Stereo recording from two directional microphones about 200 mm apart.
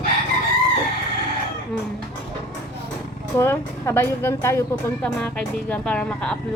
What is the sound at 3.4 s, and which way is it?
Speech, 15° left (ahead or behind).